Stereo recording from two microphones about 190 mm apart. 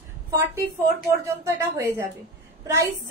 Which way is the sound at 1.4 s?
15° right (ahead or behind).